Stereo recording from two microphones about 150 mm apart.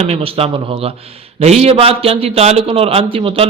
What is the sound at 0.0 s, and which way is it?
A man's voice, 40° right (ahead or behind).